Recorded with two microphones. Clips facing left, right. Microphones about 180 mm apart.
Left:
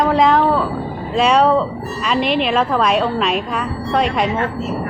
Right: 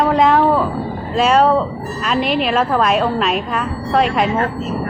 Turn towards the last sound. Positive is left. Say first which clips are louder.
# right 1 dB
turn(degrees=-35)  # may be behind; listen again after turning